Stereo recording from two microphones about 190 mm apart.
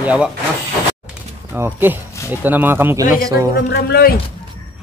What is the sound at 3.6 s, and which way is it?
Speech, 60° left (ahead or behind).